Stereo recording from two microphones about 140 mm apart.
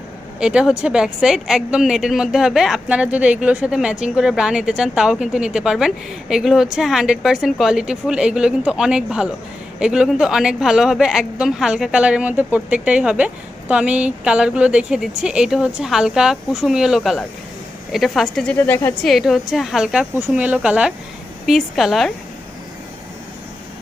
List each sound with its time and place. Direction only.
0.3 s speech: 5° right (ahead or behind)
18.5 s a woman's voice: 15° left (ahead or behind)
19.0 s speech: centre (ahead or behind)